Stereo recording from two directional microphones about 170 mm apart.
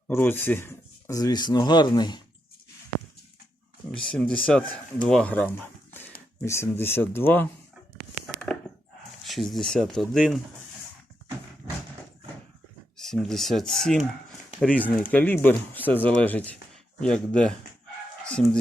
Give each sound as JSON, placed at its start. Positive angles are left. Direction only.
{"t": 0.1, "sound": "speech", "side_deg": 15}
{"t": 4.0, "sound": "speech", "side_deg": 5}
{"t": 8.5, "sound": "a sound", "side_deg": 5}
{"t": 9.2, "sound": "speech", "side_deg": 0}
{"t": 13.0, "sound": "speech", "side_deg": 0}